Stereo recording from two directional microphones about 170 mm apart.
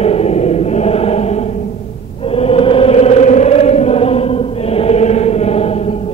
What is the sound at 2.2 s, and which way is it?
Chant, 35° left (ahead or behind).